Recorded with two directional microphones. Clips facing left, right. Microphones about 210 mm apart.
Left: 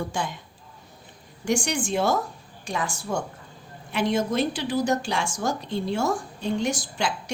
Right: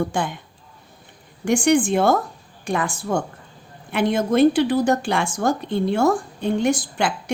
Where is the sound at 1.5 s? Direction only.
55° right (ahead or behind).